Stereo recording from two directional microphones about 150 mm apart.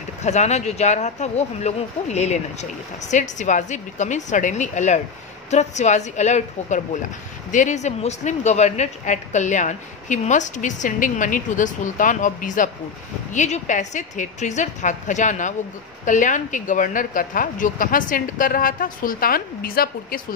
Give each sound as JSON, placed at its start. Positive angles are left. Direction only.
{"t": 0.2, "sound": "a woman's voice", "side_deg": 50}